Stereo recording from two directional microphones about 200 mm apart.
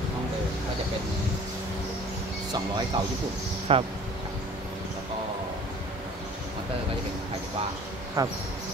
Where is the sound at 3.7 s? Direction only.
30° right (ahead or behind).